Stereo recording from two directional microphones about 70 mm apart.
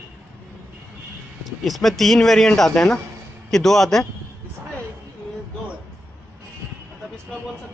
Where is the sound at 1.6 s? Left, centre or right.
Centre.